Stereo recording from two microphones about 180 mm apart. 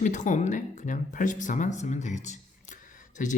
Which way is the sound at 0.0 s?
45° left (ahead or behind).